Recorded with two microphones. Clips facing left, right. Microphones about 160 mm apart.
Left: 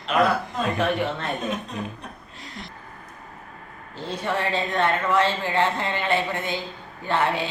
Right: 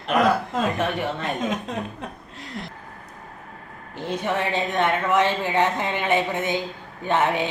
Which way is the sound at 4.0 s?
20° right (ahead or behind).